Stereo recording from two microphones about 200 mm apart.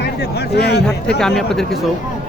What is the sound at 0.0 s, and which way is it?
Speech, 55° left (ahead or behind).